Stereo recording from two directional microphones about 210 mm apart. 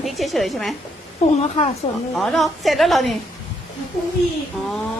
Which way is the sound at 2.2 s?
Centre (ahead or behind).